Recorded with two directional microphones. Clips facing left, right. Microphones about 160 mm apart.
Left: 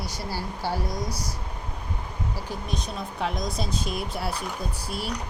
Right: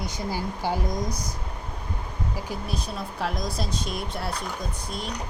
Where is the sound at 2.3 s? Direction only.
10° right (ahead or behind).